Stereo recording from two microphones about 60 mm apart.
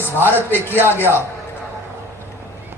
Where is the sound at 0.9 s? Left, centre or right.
Left.